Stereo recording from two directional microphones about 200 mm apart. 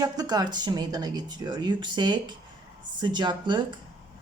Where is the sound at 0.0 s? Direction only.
20° right (ahead or behind).